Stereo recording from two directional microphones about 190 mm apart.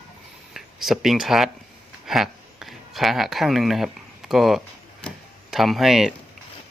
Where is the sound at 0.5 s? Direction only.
Centre (ahead or behind).